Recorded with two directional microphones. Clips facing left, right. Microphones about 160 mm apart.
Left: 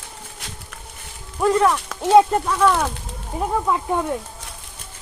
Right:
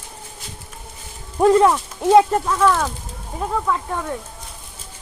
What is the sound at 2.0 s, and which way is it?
Speech, centre (ahead or behind).